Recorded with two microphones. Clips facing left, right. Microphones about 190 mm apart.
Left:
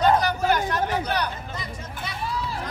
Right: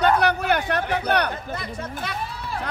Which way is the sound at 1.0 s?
60° right (ahead or behind).